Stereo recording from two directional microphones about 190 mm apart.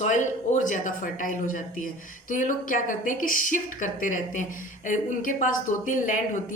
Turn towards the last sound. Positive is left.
turn(degrees=40)  # may be behind; listen again after turning